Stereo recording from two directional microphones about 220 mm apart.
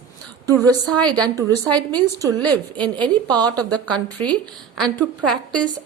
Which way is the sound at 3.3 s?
5° left (ahead or behind).